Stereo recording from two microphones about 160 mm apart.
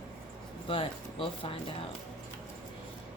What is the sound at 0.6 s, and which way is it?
Speech, 35° left (ahead or behind).